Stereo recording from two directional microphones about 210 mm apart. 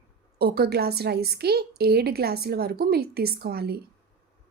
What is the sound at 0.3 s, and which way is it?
Speech, 45° right (ahead or behind).